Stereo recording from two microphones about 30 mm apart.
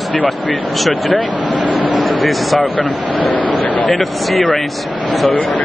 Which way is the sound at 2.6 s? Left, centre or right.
Left.